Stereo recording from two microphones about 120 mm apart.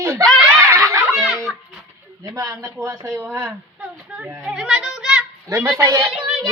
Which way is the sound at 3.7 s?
10° right (ahead or behind).